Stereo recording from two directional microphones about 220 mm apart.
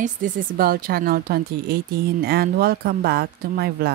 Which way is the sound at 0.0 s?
40° right (ahead or behind).